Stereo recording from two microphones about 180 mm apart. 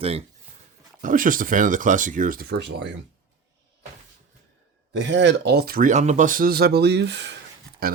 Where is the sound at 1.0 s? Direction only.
50° right (ahead or behind); by 2.8 s 70° right (ahead or behind).